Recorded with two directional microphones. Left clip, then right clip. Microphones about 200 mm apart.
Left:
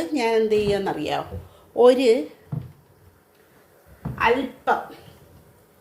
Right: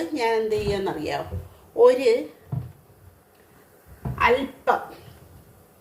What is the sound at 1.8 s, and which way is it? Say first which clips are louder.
Speech: left 1 dB; 40° left (ahead or behind).